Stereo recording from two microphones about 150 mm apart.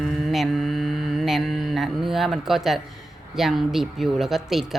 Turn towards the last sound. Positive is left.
turn(degrees=0)  # may be behind; listen again after turning